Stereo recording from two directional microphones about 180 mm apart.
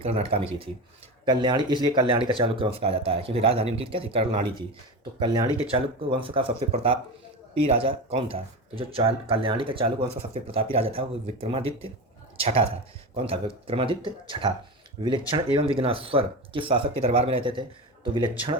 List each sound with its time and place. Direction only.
0.0 s speech: 30° right (ahead or behind)
13.2 s speech: 30° right (ahead or behind)